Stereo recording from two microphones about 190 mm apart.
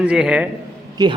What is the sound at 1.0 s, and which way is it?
Speech, 20° right (ahead or behind).